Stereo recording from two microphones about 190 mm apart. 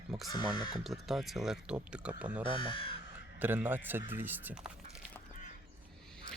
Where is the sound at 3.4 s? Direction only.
10° right (ahead or behind).